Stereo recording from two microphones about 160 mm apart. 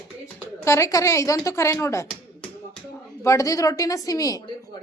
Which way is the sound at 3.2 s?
20° left (ahead or behind).